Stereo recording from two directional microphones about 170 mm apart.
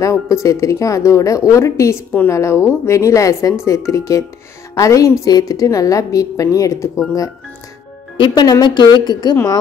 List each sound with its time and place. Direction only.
0.0 s a woman's voice: 20° left (ahead or behind)
8.2 s a woman's voice: 25° left (ahead or behind)